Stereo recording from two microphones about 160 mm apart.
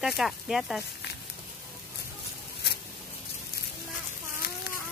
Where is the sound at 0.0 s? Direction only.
Centre (ahead or behind).